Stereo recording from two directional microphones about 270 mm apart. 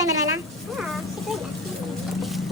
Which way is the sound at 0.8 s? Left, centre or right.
Centre.